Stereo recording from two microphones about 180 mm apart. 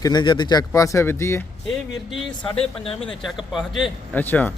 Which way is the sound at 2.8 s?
30° left (ahead or behind).